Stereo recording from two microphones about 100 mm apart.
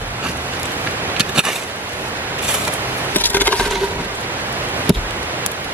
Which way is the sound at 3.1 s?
20° left (ahead or behind).